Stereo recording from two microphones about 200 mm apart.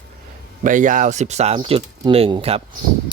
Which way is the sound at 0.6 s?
40° right (ahead or behind).